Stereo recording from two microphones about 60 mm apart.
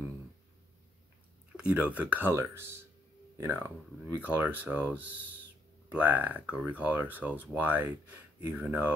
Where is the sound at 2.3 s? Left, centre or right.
Right.